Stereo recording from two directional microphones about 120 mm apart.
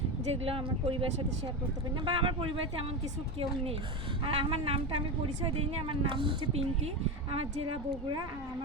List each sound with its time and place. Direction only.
0.4 s speech: 50° right (ahead or behind)
2.0 s speech: 45° right (ahead or behind)
4.2 s speech: 50° right (ahead or behind)